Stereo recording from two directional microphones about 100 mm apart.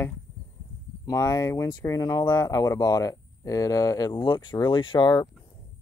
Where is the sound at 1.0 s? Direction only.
40° left (ahead or behind).